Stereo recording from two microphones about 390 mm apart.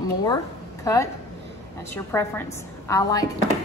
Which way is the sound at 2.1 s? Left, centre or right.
Centre.